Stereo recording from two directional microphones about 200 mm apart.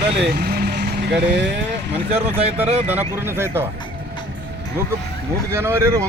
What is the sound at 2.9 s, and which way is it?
Speech, 10° right (ahead or behind).